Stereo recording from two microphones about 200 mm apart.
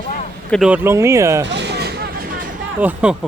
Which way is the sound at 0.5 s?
5° right (ahead or behind).